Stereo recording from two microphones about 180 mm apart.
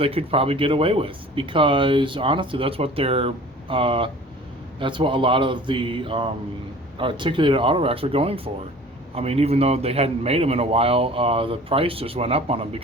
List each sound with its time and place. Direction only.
0.0 s speech: 30° right (ahead or behind)